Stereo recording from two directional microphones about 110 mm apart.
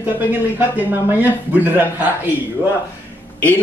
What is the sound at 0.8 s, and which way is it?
Speech, 15° right (ahead or behind).